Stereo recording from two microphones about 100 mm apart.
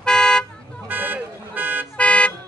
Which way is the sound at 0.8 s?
20° right (ahead or behind).